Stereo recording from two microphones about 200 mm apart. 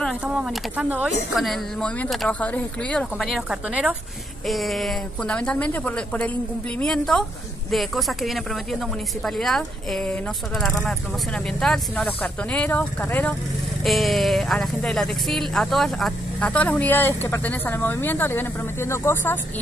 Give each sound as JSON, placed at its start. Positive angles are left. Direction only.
{"t": 0.0, "sound": "speech", "side_deg": -5}